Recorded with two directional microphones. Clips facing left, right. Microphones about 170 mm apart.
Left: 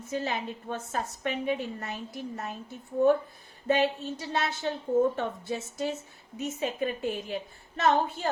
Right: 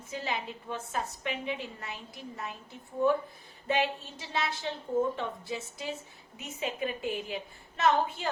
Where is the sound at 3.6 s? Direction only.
40° left (ahead or behind).